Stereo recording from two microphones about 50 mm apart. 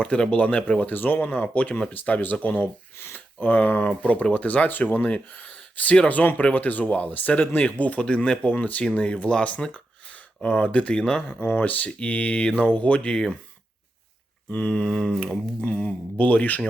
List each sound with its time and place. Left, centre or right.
0.0 s speech: centre; by 1.2 s left
1.2 s speech: left
9.6 s a sound: centre
10.4 s speech: left
11.3 s speech: left; by 13.3 s centre
14.5 s a sound: left
15.6 s speech: left